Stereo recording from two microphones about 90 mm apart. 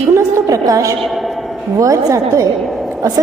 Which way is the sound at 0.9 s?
Centre (ahead or behind).